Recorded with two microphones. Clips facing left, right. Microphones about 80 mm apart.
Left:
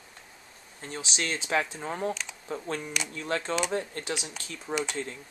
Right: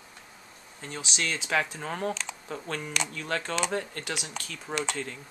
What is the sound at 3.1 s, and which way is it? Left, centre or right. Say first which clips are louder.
Speech: left 1 dB; left.